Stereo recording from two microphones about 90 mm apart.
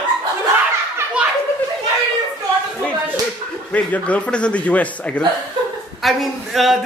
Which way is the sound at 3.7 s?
15° left (ahead or behind).